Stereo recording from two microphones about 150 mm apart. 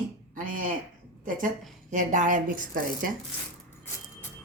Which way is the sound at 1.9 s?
55° right (ahead or behind).